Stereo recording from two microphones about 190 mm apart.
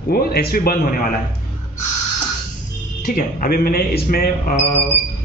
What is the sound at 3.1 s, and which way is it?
Speech, 50° left (ahead or behind).